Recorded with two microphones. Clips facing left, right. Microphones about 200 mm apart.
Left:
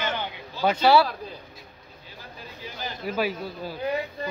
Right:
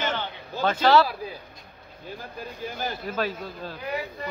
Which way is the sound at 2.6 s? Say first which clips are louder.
Right 4 dB; 50° right (ahead or behind).